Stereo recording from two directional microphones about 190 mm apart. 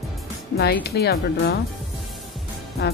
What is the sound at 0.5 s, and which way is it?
Speech, 55° left (ahead or behind).